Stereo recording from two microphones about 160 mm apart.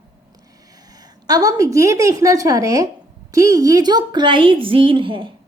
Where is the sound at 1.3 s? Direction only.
20° right (ahead or behind).